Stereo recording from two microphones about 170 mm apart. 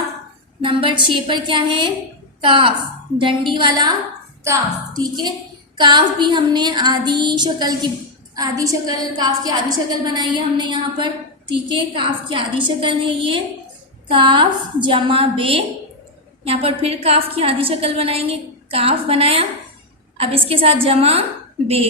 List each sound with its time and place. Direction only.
0.6 s a woman's voice: 30° right (ahead or behind)